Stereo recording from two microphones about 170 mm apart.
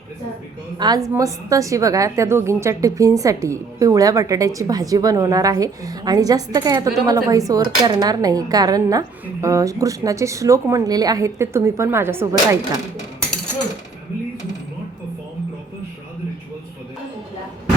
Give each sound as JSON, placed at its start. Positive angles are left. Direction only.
{"t": 0.8, "sound": "a woman's voice", "side_deg": -25}